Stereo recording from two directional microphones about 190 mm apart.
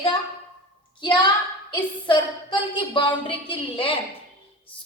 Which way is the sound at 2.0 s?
25° left (ahead or behind).